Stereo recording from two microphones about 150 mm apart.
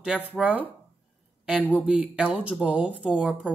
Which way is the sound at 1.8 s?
5° right (ahead or behind).